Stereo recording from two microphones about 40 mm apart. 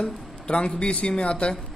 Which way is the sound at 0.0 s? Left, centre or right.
Left.